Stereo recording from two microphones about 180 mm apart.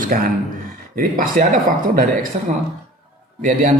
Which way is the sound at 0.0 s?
50° right (ahead or behind).